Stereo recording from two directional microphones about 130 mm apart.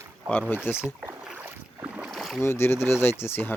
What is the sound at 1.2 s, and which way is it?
Boat, 15° right (ahead or behind).